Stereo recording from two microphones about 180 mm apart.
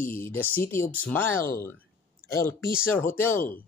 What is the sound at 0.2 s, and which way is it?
Speech, 10° left (ahead or behind).